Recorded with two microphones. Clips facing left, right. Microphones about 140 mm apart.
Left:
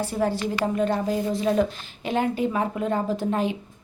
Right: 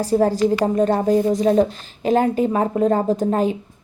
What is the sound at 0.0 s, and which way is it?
A woman's voice, 40° right (ahead or behind).